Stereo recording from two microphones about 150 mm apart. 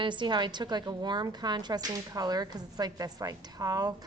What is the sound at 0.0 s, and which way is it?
A woman's voice, 30° right (ahead or behind).